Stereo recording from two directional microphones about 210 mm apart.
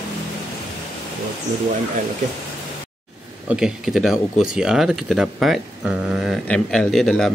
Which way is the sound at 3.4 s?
5° right (ahead or behind).